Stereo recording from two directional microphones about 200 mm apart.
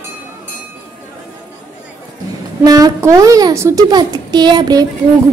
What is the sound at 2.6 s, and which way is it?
A child's voice, 20° right (ahead or behind).